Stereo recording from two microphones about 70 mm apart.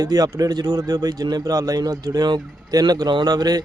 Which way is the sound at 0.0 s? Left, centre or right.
Right.